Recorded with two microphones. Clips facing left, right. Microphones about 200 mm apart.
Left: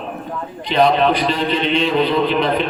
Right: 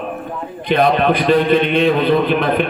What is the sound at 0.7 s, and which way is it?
A man's voice, 55° right (ahead or behind).